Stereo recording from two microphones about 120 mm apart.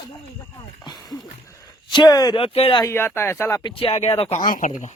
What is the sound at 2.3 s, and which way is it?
Speech, 55° left (ahead or behind).